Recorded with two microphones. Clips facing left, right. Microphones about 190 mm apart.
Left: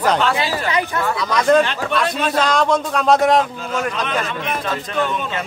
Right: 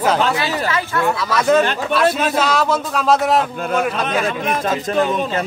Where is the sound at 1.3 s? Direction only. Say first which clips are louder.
Left 1 dB; 5° right (ahead or behind).